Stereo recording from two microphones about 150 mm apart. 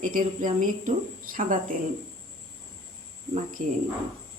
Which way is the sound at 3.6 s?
60° right (ahead or behind).